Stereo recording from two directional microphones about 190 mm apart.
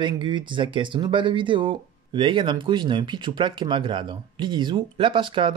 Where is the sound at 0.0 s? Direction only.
25° right (ahead or behind).